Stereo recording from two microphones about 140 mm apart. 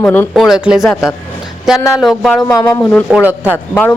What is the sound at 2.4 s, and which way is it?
Speech, 25° left (ahead or behind).